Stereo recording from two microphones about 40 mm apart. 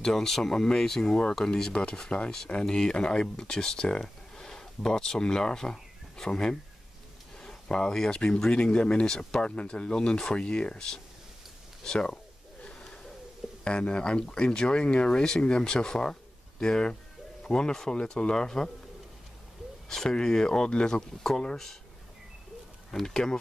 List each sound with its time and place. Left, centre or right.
0.0 s speech: centre
1.4 s speech: left
7.3 s a sound: centre
8.8 s speech: left
9.6 s speech: left
13.7 s speech: left
19.9 s speech: centre
22.8 s speech: centre